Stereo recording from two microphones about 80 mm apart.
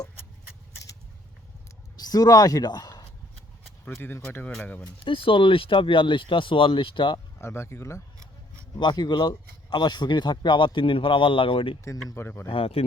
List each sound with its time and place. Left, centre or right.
2.0 s speech: left
4.0 s speech: left
5.0 s speech: left
7.3 s speech: left
8.8 s speech: left
11.9 s speech: left